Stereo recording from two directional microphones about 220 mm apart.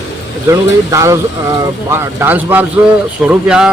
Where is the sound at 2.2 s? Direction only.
10° right (ahead or behind).